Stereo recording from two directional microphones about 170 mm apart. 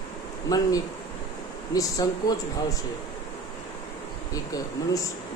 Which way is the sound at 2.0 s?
20° left (ahead or behind).